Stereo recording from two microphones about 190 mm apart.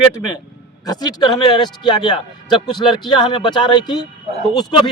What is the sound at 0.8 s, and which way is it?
Speech, 20° left (ahead or behind).